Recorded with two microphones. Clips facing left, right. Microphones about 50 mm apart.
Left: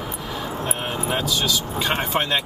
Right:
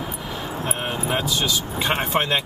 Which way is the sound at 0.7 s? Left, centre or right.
Centre.